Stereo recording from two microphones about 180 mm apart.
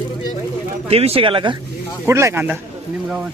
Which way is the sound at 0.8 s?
35° right (ahead or behind).